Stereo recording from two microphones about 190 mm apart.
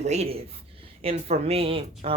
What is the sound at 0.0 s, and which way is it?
Speech, 35° right (ahead or behind).